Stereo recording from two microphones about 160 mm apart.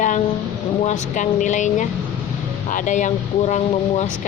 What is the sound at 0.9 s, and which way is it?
Speech, 50° left (ahead or behind).